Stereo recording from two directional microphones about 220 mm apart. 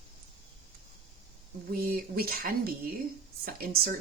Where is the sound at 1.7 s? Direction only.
45° right (ahead or behind).